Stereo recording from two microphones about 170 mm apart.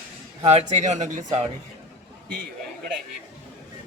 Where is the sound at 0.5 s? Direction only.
45° right (ahead or behind).